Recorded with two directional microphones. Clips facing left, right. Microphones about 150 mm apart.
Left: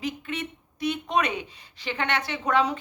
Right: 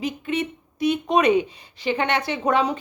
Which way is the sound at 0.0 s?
15° right (ahead or behind).